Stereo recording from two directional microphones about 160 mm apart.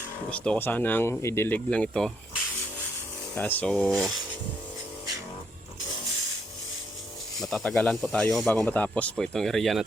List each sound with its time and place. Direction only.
0.3 s speech: 5° left (ahead or behind)
3.3 s speech: 10° left (ahead or behind)
7.4 s speech: centre (ahead or behind)